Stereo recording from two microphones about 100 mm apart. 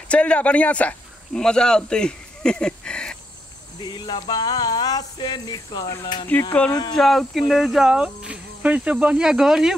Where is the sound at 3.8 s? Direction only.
45° left (ahead or behind).